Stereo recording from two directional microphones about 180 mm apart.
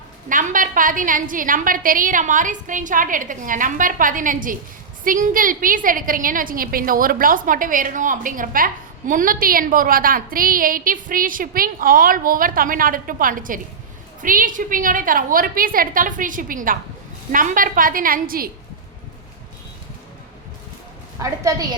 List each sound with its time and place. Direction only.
0.3 s a woman's voice: 50° right (ahead or behind)
21.2 s a woman's voice: 20° right (ahead or behind)